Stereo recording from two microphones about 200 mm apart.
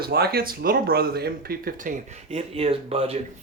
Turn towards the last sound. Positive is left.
turn(degrees=-30)  # may be behind; listen again after turning